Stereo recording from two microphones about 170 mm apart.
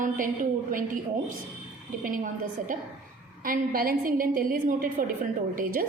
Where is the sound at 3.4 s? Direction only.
55° right (ahead or behind).